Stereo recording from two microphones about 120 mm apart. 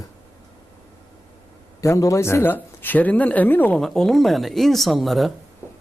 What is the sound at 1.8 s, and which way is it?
Speech, 25° left (ahead or behind).